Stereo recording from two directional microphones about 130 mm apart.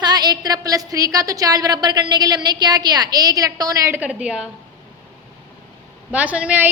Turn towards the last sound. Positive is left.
turn(degrees=-10)  # may be behind; listen again after turning